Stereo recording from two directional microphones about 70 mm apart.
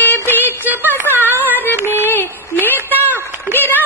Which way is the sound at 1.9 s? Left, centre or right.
Left.